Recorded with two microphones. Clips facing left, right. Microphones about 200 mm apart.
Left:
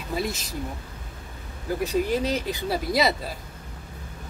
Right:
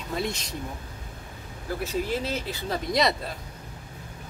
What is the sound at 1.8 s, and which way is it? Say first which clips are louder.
Speech: left 5 dB; 15° left (ahead or behind).